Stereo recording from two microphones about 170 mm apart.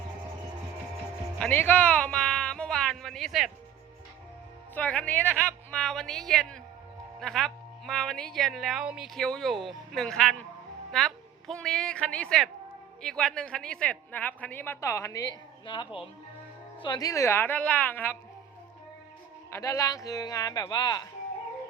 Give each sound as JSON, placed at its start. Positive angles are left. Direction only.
{"t": 1.4, "sound": "a sound", "side_deg": 10}
{"t": 4.7, "sound": "a woman's voice", "side_deg": 5}
{"t": 19.5, "sound": "speech", "side_deg": 15}